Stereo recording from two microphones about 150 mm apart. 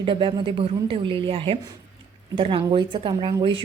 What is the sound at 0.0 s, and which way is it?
A woman's voice, 35° right (ahead or behind).